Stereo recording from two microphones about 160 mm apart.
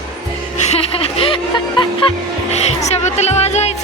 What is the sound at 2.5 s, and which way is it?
Music, 45° left (ahead or behind).